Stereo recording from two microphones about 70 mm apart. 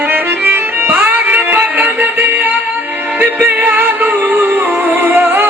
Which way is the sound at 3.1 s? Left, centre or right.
Right.